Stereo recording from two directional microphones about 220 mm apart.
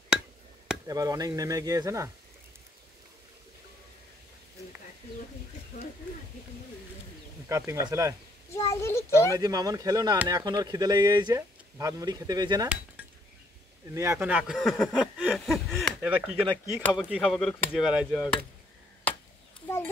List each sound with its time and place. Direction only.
0.8 s speech: 15° right (ahead or behind)
7.4 s speech: 15° right (ahead or behind)
8.5 s a child's voice: 15° left (ahead or behind)
9.3 s speech: 15° right (ahead or behind)
13.8 s speech: 15° right (ahead or behind)
19.1 s chop: 5° left (ahead or behind)